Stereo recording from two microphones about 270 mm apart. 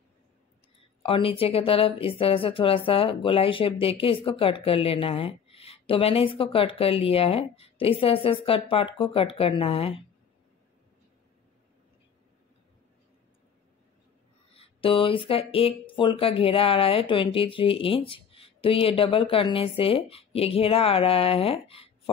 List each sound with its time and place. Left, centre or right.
0.7 s speech: centre
14.5 s speech: left